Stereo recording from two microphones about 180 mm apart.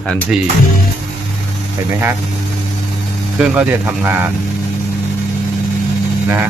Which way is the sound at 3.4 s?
5° right (ahead or behind).